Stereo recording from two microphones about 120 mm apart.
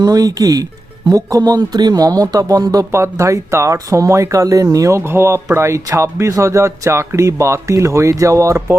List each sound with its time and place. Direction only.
0.0 s speech: 30° right (ahead or behind)